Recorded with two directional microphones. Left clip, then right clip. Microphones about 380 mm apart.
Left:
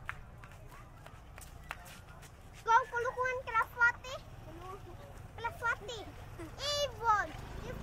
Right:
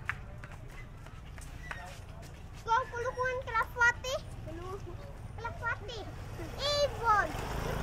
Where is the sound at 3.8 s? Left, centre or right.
Centre.